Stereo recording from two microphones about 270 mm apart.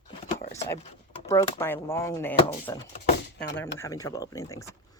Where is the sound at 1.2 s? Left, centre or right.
Centre.